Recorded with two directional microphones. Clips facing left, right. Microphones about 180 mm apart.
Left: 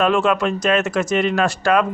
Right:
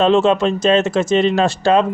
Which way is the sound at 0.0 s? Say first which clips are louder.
Right 4 dB; 25° right (ahead or behind).